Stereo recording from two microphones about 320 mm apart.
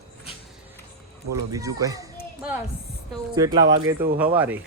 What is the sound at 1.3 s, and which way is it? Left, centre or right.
Speech, centre.